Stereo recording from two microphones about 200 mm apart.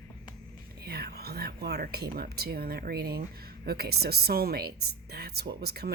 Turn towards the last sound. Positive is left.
turn(degrees=-50)  # may be behind; listen again after turning